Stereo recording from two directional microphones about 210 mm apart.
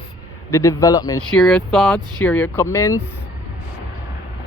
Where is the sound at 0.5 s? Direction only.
15° left (ahead or behind).